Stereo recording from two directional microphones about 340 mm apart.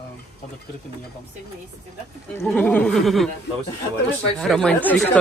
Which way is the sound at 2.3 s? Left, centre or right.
Centre.